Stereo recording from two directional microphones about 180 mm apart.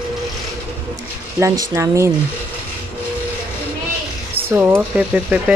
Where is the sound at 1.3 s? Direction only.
15° right (ahead or behind).